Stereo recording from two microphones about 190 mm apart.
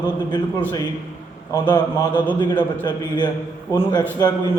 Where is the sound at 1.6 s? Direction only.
20° left (ahead or behind).